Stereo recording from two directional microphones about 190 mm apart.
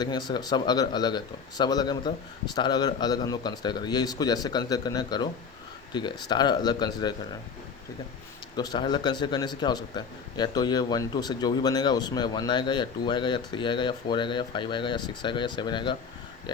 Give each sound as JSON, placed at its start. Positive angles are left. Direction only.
{"t": 0.0, "sound": "a man's voice", "side_deg": 20}
{"t": 8.5, "sound": "a man's voice", "side_deg": 20}